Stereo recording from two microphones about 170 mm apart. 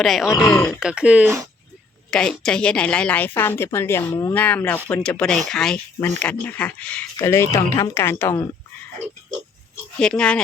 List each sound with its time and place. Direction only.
0.0 s speech: centre (ahead or behind)
2.0 s speech: 5° left (ahead or behind)
10.0 s speech: 5° left (ahead or behind)